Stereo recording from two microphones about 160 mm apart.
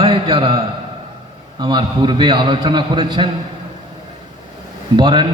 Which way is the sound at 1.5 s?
25° right (ahead or behind).